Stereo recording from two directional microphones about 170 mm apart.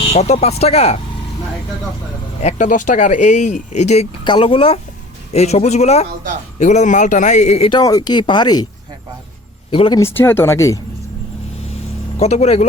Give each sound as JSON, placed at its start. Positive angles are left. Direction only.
{"t": 0.0, "sound": "speech", "side_deg": 40}
{"t": 2.4, "sound": "speech", "side_deg": 45}
{"t": 4.2, "sound": "speech", "side_deg": 30}
{"t": 7.8, "sound": "speech", "side_deg": 20}
{"t": 9.7, "sound": "speech", "side_deg": 30}
{"t": 10.0, "sound": "speech", "side_deg": 15}
{"t": 12.2, "sound": "speech", "side_deg": 40}